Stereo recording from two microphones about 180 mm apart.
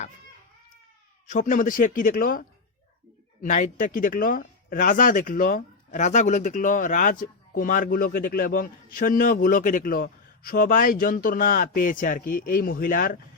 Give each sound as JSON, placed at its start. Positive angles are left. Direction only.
{"t": 1.3, "sound": "speech", "side_deg": 45}
{"t": 3.4, "sound": "speech", "side_deg": 45}